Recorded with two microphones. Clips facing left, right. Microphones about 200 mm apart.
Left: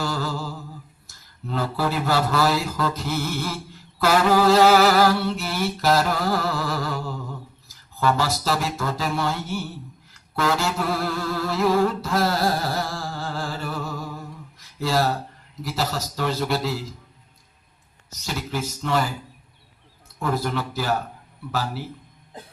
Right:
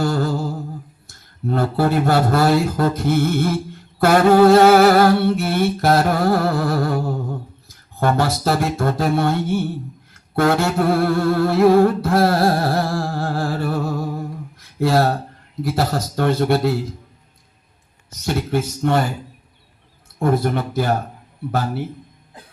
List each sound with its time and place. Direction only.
0.0 s a sound: 55° right (ahead or behind)
10.3 s humming: 60° right (ahead or behind)
14.3 s a sound: 55° right (ahead or behind)
15.6 s humming: 60° right (ahead or behind)
18.1 s humming: 55° right (ahead or behind)
20.1 s speech: 55° right (ahead or behind)
21.5 s humming: 55° right (ahead or behind)